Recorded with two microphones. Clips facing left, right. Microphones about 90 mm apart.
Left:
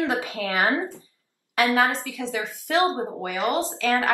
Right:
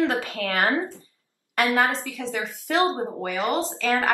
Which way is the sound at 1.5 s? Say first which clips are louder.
Left 1 dB; 5° left (ahead or behind).